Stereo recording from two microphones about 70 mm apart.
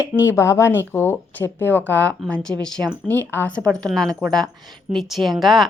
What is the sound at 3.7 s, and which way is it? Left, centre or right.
Speech, centre.